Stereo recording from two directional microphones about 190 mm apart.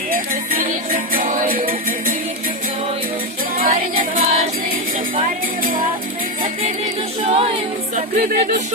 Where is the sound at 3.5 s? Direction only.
50° right (ahead or behind).